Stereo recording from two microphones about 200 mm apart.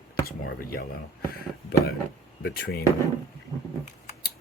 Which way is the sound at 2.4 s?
50° left (ahead or behind).